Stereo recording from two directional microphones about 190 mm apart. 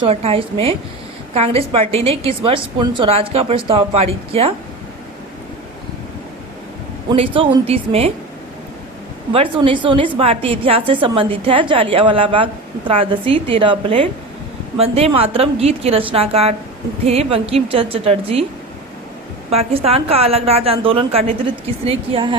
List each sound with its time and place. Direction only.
0.0 s a woman's voice: 30° right (ahead or behind)
7.1 s a woman's voice: 25° right (ahead or behind)
9.3 s a woman's voice: 30° right (ahead or behind)
19.5 s a woman's voice: 35° right (ahead or behind)